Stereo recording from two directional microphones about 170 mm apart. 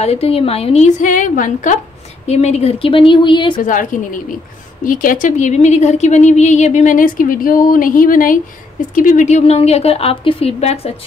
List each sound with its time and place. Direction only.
0.0 s a woman's voice: 35° left (ahead or behind)
2.2 s a woman's voice: 40° left (ahead or behind)
3.6 s a woman's voice: 50° left (ahead or behind)